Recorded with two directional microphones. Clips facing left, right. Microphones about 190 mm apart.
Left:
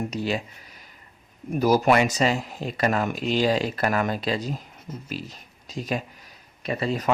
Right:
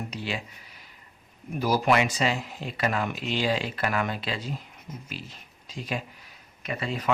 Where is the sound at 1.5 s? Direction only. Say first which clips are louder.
Left 4 dB; 45° left (ahead or behind).